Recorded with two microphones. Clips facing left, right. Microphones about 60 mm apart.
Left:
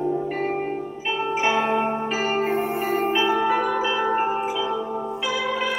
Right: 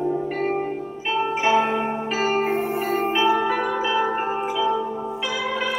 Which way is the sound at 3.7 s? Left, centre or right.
Centre.